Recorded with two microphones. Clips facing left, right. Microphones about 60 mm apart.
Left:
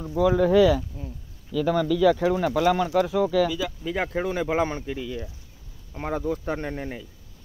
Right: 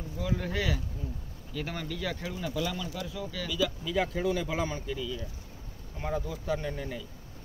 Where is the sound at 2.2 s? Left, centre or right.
Left.